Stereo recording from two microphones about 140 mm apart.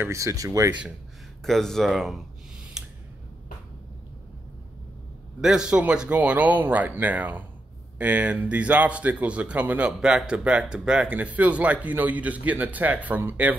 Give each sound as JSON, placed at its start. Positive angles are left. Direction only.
{"t": 0.0, "sound": "speech", "side_deg": -20}
{"t": 1.4, "sound": "speech", "side_deg": 5}
{"t": 2.8, "sound": "a sound", "side_deg": -5}
{"t": 5.4, "sound": "speech", "side_deg": -5}